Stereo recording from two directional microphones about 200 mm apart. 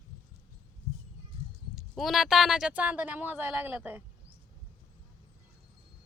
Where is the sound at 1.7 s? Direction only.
Centre (ahead or behind).